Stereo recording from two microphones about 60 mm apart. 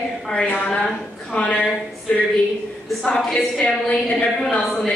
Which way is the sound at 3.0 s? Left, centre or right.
Centre.